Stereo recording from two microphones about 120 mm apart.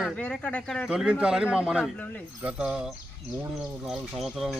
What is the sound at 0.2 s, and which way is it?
Speech, 10° left (ahead or behind).